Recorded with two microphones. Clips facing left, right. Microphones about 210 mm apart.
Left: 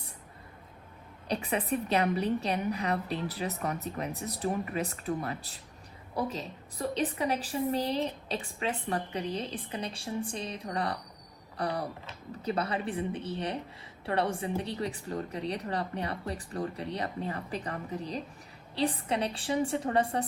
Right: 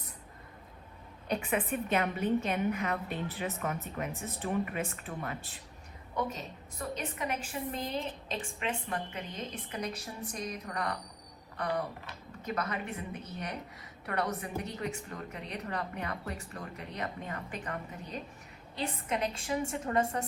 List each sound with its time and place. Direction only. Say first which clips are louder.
1.3 s a woman's voice: left 1 dB; 35° left (ahead or behind)